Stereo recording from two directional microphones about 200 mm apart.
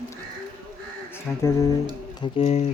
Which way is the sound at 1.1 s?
15° left (ahead or behind).